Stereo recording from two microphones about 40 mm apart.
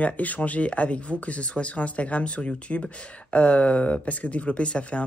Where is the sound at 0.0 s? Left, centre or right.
Left.